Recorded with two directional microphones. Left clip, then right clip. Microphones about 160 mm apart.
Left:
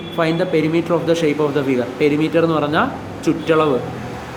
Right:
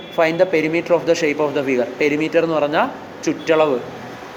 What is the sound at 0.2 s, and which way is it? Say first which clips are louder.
Speech: right 2 dB; 25° right (ahead or behind).